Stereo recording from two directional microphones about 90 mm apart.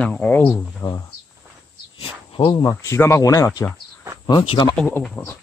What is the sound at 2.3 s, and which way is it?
Speech, 75° left (ahead or behind).